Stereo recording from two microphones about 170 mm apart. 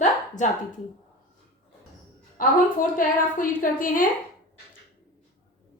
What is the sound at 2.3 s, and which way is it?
A woman's voice, 55° left (ahead or behind).